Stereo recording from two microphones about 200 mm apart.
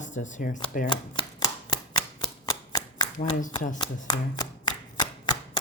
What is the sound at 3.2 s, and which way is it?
Speech, 40° left (ahead or behind).